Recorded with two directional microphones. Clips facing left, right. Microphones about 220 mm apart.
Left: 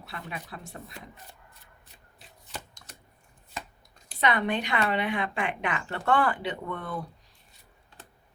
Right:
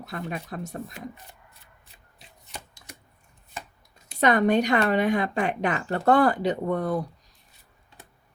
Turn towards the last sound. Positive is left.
turn(degrees=-40)  # may be behind; listen again after turning